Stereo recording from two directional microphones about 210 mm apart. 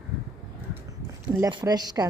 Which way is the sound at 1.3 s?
15° right (ahead or behind).